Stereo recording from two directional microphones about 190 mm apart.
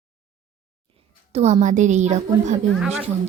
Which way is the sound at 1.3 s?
35° right (ahead or behind).